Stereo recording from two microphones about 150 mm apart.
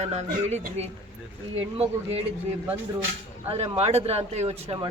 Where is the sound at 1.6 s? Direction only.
40° right (ahead or behind).